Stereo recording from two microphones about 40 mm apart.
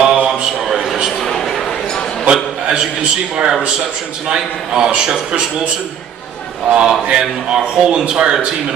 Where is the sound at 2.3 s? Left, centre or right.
Right.